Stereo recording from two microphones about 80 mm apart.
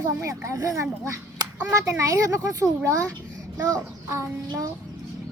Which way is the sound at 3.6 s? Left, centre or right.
Right.